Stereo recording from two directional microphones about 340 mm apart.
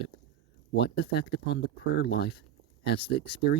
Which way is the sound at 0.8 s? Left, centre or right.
Left.